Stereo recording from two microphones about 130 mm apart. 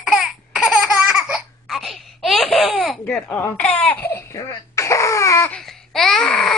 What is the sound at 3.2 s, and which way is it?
Baby laughter, 15° left (ahead or behind).